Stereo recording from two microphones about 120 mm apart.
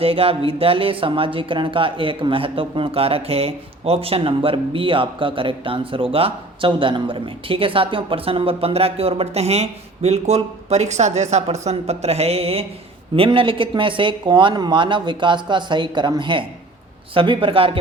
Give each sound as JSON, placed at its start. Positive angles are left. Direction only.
{"t": 0.0, "sound": "speech", "side_deg": -55}